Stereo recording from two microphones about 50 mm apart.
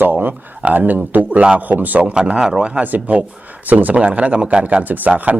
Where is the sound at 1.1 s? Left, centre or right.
Right.